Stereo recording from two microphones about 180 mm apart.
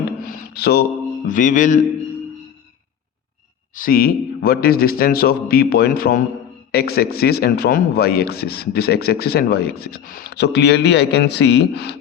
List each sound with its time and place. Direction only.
0.2 s a sound: 50° left (ahead or behind)
1.3 s music: 45° left (ahead or behind)
3.8 s a man's voice: 55° left (ahead or behind); by 11.9 s 70° left (ahead or behind)